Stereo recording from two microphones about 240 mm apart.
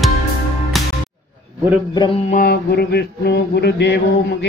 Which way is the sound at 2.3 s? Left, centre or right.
Left.